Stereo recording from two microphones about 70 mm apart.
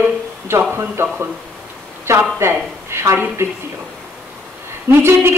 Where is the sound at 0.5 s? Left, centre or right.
Right.